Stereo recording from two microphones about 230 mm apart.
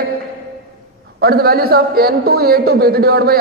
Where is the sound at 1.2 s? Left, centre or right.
Right.